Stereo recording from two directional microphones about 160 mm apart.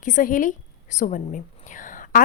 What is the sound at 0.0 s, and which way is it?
A woman's voice, 55° left (ahead or behind).